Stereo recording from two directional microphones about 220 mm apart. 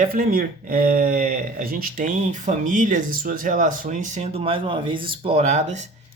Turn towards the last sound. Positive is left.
turn(degrees=-30)  # may be behind; listen again after turning